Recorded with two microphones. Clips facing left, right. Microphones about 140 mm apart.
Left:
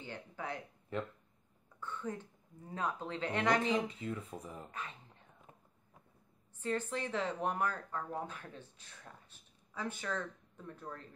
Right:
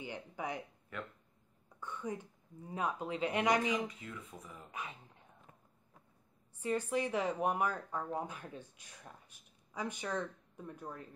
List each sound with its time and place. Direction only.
0.0 s speech: 15° right (ahead or behind)
0.9 s speech: 30° left (ahead or behind)
1.8 s a sound: 15° right (ahead or behind)
2.7 s speech: 10° right (ahead or behind)
3.6 s speech: 30° left (ahead or behind)
4.6 s speech: 10° right (ahead or behind)
6.6 s speech: 15° right (ahead or behind)